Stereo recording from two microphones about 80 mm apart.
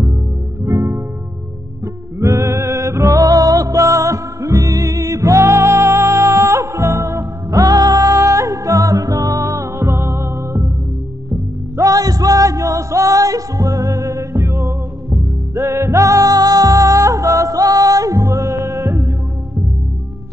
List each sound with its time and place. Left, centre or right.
0.7 s music: right
2.1 s music: right
11.7 s music: right